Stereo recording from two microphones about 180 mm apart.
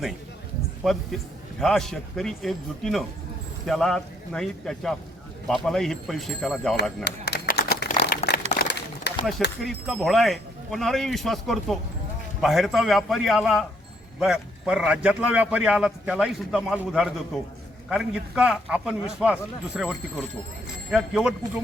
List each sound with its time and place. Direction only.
0.8 s a man's voice: centre (ahead or behind)
7.0 s a sound: 60° left (ahead or behind)
9.6 s a man's voice: centre (ahead or behind)